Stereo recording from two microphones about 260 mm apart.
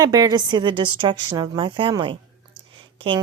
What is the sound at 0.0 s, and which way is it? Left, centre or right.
A woman's voice, centre.